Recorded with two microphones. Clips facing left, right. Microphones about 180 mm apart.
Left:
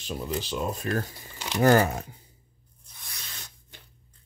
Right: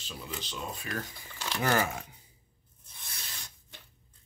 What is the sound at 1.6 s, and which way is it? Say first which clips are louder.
Speech: left 9 dB; 40° left (ahead or behind).